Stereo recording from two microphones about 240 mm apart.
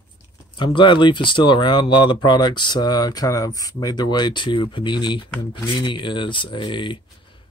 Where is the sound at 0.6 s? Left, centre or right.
Centre.